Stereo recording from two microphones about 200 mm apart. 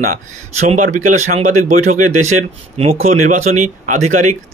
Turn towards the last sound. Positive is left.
turn(degrees=-35)  # may be behind; listen again after turning